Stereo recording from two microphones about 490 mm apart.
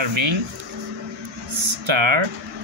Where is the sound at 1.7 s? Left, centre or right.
Right.